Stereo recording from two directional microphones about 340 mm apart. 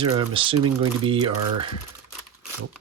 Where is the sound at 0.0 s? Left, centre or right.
Centre.